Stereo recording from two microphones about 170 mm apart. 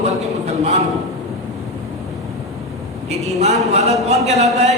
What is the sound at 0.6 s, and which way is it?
Speech, 40° right (ahead or behind).